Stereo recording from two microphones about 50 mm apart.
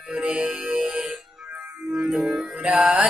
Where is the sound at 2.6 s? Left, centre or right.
Right.